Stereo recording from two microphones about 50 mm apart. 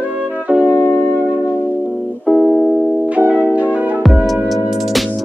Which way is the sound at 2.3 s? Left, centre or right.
Centre.